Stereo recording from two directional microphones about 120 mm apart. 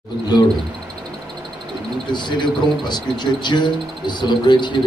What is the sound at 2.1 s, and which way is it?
Speech, 40° left (ahead or behind).